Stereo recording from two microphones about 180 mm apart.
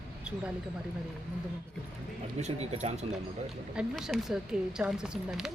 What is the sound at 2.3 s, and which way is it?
Speech, 40° right (ahead or behind).